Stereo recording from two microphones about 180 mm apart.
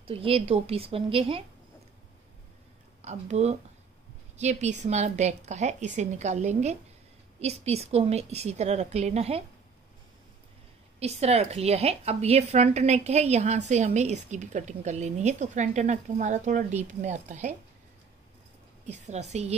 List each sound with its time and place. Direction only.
0.0 s a woman's voice: 30° right (ahead or behind)
3.0 s a woman's voice: 35° right (ahead or behind)
11.0 s a woman's voice: 35° right (ahead or behind)
18.9 s a woman's voice: 40° right (ahead or behind)